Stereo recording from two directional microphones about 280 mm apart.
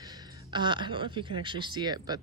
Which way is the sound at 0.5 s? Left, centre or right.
Centre.